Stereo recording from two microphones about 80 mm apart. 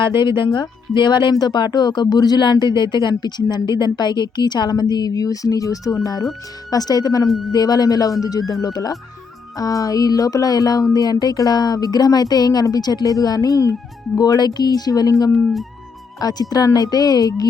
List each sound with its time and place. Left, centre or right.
0.0 s speech: left
1.3 s speech: left
16.2 s speech: left